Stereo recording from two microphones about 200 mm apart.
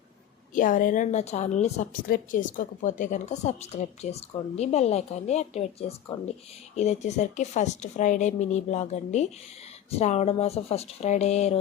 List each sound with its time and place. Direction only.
0.5 s a woman's voice: 40° left (ahead or behind)